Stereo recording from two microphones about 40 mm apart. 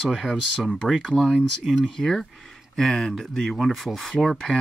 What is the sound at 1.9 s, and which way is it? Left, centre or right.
Speech, centre.